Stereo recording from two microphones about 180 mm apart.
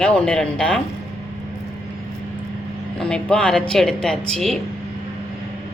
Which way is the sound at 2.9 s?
5° left (ahead or behind).